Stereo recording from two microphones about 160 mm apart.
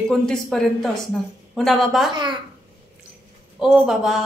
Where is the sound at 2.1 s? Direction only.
30° right (ahead or behind).